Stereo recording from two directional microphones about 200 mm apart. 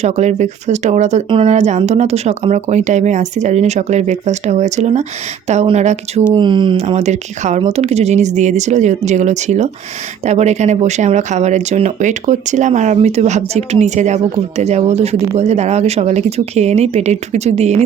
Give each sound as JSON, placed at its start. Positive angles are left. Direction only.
{"t": 0.0, "sound": "speech", "side_deg": -35}
{"t": 6.3, "sound": "speech", "side_deg": -25}